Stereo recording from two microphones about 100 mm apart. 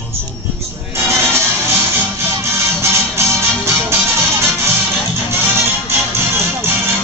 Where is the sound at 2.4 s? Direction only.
25° right (ahead or behind).